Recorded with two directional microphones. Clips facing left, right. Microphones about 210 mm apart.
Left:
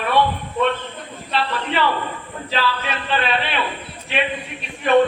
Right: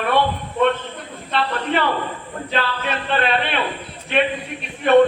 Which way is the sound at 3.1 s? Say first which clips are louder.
Right 1 dB; 50° right (ahead or behind).